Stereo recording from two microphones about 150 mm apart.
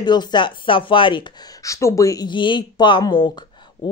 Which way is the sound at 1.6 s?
20° left (ahead or behind).